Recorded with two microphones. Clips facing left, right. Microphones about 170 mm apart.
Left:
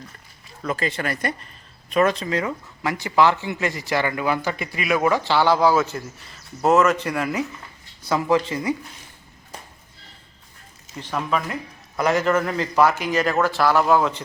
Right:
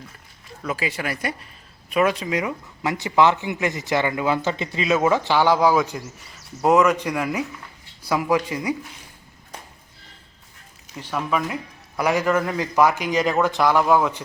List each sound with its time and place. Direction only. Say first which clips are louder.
0.6 s speech: left 1 dB; 10° right (ahead or behind)
10.9 s speech: even; 5° right (ahead or behind)